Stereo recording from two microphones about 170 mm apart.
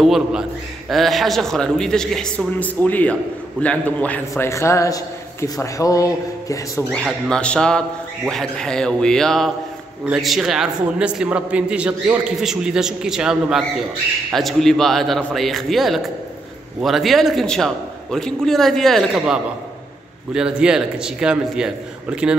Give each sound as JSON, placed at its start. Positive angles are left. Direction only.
{"t": 0.0, "sound": "a man's voice", "side_deg": -5}
{"t": 6.9, "sound": "a man's voice", "side_deg": 5}